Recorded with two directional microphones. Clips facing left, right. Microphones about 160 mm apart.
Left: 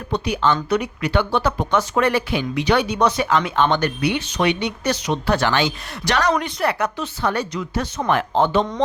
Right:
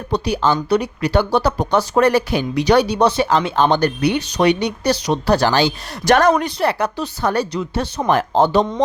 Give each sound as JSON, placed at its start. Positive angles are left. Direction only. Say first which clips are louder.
{"t": 0.1, "sound": "speech", "louder": "right 2 dB", "side_deg": -35}